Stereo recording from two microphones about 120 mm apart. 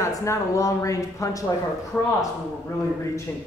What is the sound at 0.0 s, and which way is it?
Speech, 25° left (ahead or behind).